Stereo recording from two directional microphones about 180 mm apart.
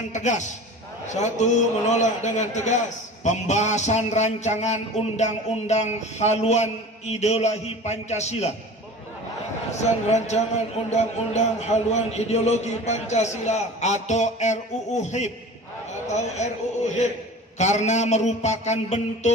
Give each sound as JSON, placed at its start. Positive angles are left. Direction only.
{"t": 0.1, "sound": "speech", "side_deg": 40}
{"t": 9.8, "sound": "speech", "side_deg": 40}
{"t": 16.4, "sound": "speech", "side_deg": 40}